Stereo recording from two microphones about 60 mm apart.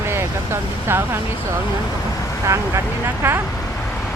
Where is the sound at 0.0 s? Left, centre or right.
Right.